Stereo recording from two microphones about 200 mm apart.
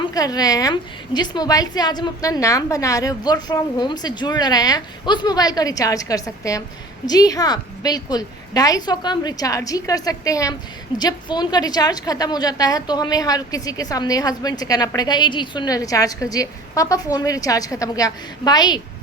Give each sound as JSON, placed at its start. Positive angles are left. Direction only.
{"t": 0.0, "sound": "a woman's voice", "side_deg": 20}